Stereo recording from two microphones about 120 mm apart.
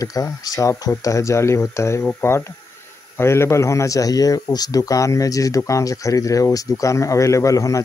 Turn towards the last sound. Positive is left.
turn(degrees=25)  # may be behind; listen again after turning